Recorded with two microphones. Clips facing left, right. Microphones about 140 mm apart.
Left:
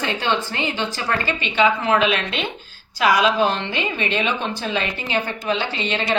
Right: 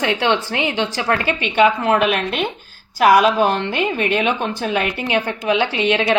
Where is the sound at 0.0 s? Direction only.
75° right (ahead or behind).